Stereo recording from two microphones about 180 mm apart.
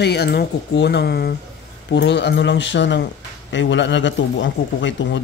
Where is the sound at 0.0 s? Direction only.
65° left (ahead or behind).